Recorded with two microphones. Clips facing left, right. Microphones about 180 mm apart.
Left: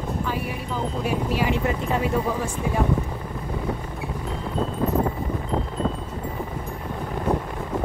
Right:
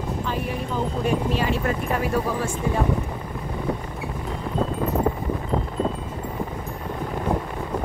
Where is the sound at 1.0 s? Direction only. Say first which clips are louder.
Even; 10° left (ahead or behind).